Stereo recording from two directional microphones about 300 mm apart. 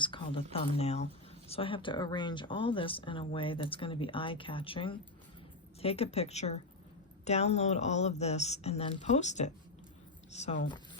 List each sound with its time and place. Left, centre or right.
0.0 s speech: centre